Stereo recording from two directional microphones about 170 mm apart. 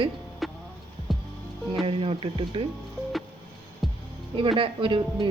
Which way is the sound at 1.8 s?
35° right (ahead or behind).